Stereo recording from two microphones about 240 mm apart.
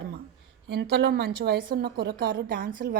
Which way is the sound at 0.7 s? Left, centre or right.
Right.